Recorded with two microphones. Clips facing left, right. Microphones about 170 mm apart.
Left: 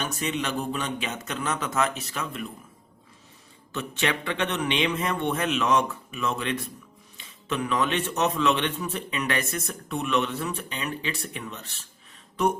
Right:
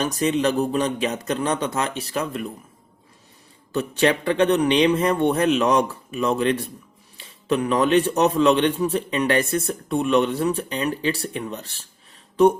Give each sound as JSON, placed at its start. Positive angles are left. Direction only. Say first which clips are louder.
{"t": 0.0, "sound": "a man's voice", "louder": "right 9 dB", "side_deg": -35}
{"t": 3.7, "sound": "a man's voice", "louder": "right 8 dB", "side_deg": -35}